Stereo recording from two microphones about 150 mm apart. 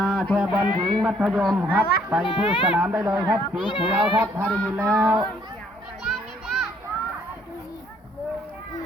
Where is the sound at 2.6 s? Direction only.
10° right (ahead or behind).